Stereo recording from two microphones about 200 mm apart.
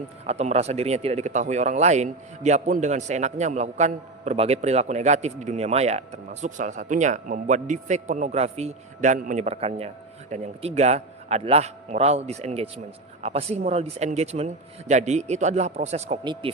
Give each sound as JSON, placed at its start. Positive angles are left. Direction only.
{"t": 0.3, "sound": "speech", "side_deg": -30}